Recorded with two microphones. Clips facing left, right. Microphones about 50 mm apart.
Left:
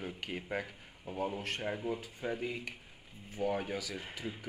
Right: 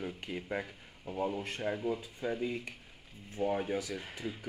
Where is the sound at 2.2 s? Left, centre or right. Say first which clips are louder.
Right 2 dB; left.